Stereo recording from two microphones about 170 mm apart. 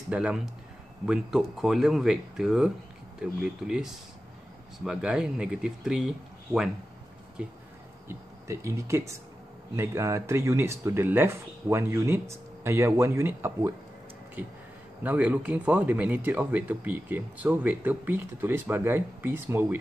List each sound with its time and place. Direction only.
0.1 s speech: 5° right (ahead or behind)
7.4 s speech: 5° right (ahead or behind)
15.0 s speech: 5° right (ahead or behind)